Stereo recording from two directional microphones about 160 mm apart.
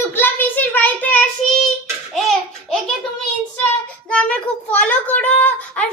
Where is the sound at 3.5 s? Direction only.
5° left (ahead or behind).